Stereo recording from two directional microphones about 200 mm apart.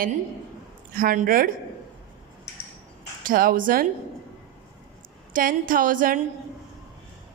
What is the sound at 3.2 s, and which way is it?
Speech, 45° right (ahead or behind).